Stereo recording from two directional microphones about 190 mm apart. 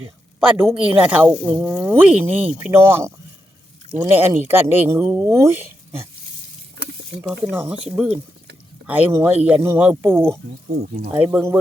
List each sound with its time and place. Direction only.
0.3 s a woman's voice: 10° right (ahead or behind)
7.3 s speech: 10° right (ahead or behind)